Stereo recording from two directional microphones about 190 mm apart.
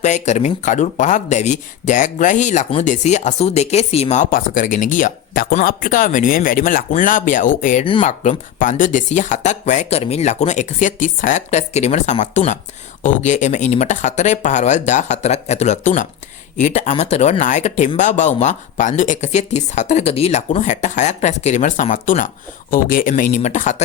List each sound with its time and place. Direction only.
0.0 s speech: 40° left (ahead or behind)